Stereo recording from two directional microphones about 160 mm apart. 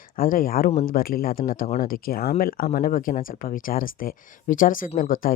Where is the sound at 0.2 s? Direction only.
60° left (ahead or behind).